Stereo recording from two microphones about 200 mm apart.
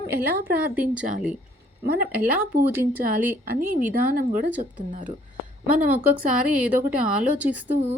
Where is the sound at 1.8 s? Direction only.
45° right (ahead or behind).